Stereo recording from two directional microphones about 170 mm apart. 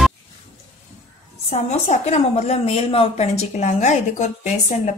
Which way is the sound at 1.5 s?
40° left (ahead or behind).